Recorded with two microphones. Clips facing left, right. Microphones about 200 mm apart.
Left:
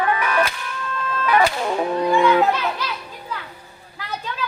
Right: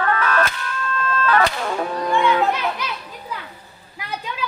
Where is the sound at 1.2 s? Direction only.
15° left (ahead or behind).